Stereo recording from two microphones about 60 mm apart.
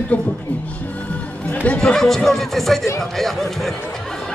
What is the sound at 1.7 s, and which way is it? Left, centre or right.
Speech, centre.